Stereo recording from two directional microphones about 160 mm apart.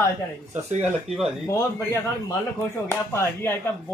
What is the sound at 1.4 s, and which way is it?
A man's voice, 15° left (ahead or behind).